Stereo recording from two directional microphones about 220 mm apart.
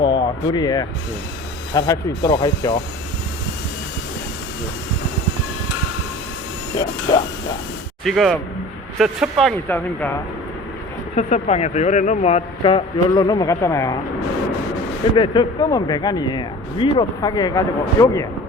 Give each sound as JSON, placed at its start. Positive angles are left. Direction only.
{"t": 0.0, "sound": "speech", "side_deg": 20}
{"t": 6.7, "sound": "speech", "side_deg": 15}
{"t": 8.0, "sound": "speech", "side_deg": 0}
{"t": 11.1, "sound": "speech", "side_deg": 30}
{"t": 15.1, "sound": "speech", "side_deg": 20}